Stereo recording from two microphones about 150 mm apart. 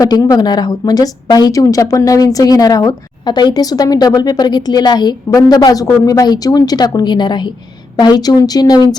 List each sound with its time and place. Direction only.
0.0 s a woman's voice: 25° left (ahead or behind)